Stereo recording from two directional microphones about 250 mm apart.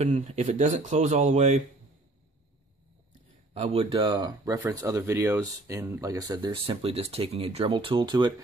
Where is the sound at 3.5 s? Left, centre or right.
Right.